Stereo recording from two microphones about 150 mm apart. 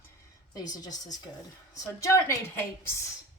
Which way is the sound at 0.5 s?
25° left (ahead or behind).